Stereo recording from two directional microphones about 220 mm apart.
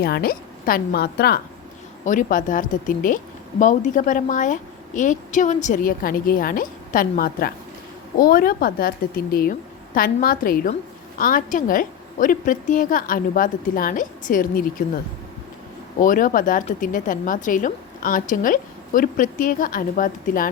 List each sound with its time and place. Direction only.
0.0 s a woman's voice: 45° left (ahead or behind)
2.0 s speech: 35° left (ahead or behind)
16.0 s speech: 40° left (ahead or behind)